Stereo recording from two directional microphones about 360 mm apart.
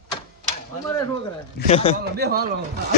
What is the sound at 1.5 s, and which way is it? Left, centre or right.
Speech, centre.